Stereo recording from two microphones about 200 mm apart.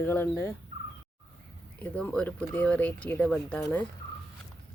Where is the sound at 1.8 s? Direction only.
5° left (ahead or behind).